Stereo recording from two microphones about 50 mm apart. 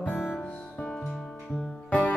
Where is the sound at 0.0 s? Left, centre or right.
Left.